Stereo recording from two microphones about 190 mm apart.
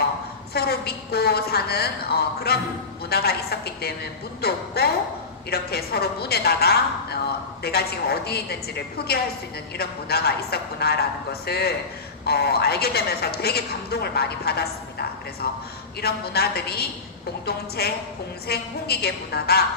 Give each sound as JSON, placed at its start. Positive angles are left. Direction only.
{"t": 0.5, "sound": "a woman's voice", "side_deg": 55}